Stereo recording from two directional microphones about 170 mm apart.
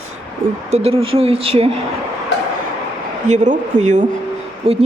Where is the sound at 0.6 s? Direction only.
40° right (ahead or behind).